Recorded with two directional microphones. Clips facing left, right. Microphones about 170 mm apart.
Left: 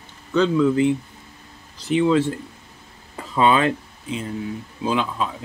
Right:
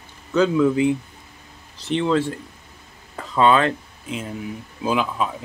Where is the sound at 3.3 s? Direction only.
15° left (ahead or behind).